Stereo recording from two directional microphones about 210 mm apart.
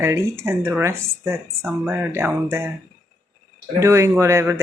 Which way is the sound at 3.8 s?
15° right (ahead or behind).